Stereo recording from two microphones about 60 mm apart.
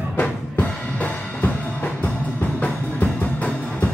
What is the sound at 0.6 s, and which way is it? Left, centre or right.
Music, left.